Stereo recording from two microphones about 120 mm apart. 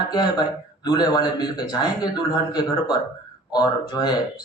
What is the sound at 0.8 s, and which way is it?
Speech, 35° left (ahead or behind).